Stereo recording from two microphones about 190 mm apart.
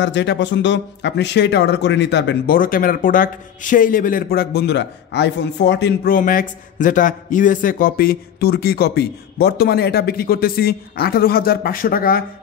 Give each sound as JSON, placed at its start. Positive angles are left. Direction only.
{"t": 0.0, "sound": "speech", "side_deg": 65}